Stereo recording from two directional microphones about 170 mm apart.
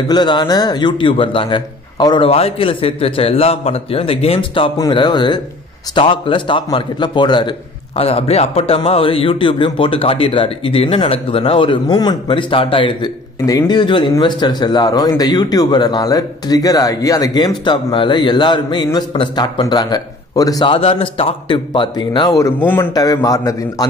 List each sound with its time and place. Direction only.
0.1 s a man's voice: 25° left (ahead or behind)